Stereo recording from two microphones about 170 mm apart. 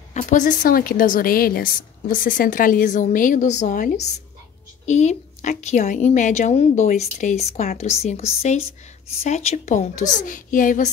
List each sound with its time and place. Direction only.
0.1 s a woman's voice: 45° left (ahead or behind)